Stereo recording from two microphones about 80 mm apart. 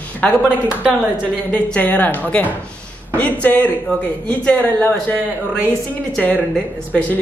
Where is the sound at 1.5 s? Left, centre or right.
Left.